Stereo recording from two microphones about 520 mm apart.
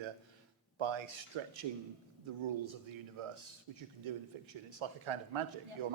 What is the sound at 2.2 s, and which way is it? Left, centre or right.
A man's voice, right.